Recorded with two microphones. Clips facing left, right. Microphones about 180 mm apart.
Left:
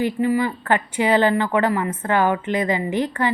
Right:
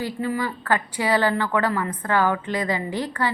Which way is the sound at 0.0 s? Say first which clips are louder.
Left 6 dB; 15° left (ahead or behind).